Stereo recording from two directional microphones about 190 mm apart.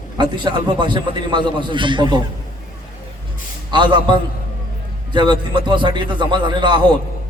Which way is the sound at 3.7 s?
25° right (ahead or behind).